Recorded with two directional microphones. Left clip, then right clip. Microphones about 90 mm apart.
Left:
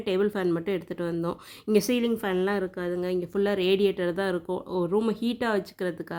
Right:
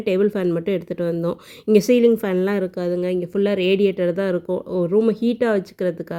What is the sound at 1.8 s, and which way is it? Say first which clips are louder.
Speech: right 11 dB; 40° right (ahead or behind).